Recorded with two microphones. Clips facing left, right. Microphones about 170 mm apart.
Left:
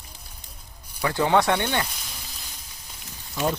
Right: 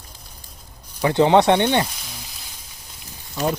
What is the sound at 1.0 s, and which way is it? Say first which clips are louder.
Speech: right 6 dB; 20° right (ahead or behind).